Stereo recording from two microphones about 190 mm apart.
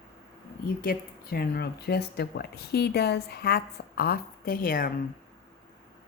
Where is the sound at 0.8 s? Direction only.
50° left (ahead or behind).